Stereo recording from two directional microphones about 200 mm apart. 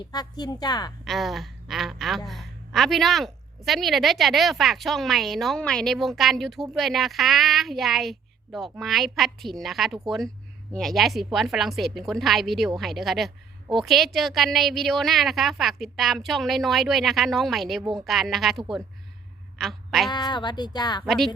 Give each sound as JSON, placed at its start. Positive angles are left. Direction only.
{"t": 0.1, "sound": "speech", "side_deg": 20}
{"t": 1.0, "sound": "a woman's voice", "side_deg": 0}
{"t": 19.5, "sound": "a sound", "side_deg": 0}
{"t": 20.1, "sound": "speech", "side_deg": 20}
{"t": 21.0, "sound": "a woman's voice", "side_deg": 0}